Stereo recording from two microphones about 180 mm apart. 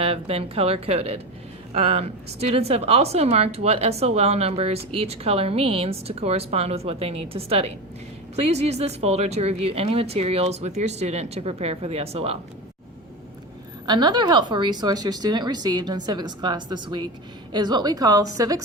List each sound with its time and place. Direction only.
0.0 s a woman's voice: 35° right (ahead or behind)
13.8 s speech: 25° right (ahead or behind)